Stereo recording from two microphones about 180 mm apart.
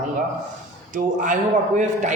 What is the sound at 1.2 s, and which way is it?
Speech, 45° right (ahead or behind).